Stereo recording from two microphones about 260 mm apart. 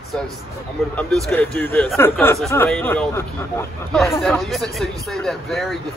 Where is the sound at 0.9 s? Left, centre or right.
Centre.